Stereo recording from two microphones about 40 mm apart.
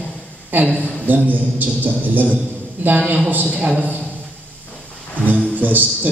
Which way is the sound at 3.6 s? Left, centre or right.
Right.